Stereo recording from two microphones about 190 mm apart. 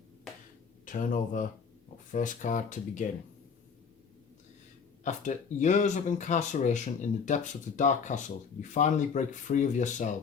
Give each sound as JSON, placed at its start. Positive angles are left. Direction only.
{"t": 0.9, "sound": "speech", "side_deg": 45}
{"t": 5.0, "sound": "speech", "side_deg": 40}